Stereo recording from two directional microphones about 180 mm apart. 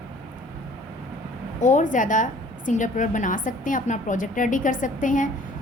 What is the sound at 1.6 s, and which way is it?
A woman's voice, 45° left (ahead or behind).